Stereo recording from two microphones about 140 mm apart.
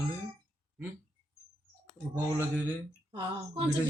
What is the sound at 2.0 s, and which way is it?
Speech, centre (ahead or behind).